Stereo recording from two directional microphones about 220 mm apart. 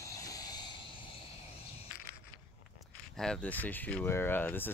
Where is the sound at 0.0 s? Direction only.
15° left (ahead or behind).